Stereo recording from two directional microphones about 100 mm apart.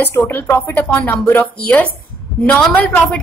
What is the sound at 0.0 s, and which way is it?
A woman's voice, 20° left (ahead or behind).